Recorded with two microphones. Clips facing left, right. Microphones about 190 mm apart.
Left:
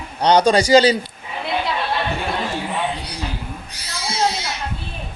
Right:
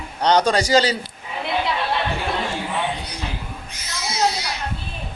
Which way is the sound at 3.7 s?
35° left (ahead or behind).